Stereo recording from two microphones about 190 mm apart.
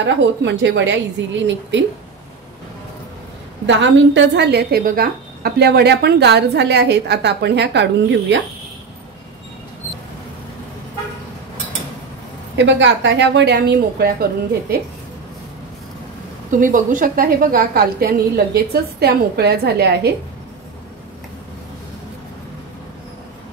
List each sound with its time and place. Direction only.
0.0 s a woman's voice: 70° right (ahead or behind)
3.6 s a woman's voice: 70° right (ahead or behind)
12.5 s a woman's voice: 70° right (ahead or behind); by 14.1 s 55° right (ahead or behind)
16.4 s a woman's voice: 45° right (ahead or behind); by 20.2 s 60° right (ahead or behind)